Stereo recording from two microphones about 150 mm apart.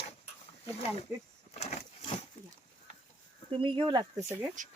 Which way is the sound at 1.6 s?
45° left (ahead or behind).